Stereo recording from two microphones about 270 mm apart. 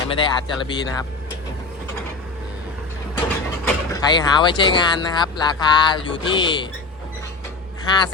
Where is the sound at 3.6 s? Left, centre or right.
Centre.